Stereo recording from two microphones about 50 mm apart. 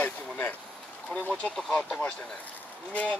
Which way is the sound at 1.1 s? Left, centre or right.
Left.